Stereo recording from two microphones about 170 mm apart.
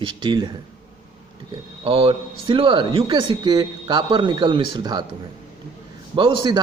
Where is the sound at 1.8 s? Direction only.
30° right (ahead or behind).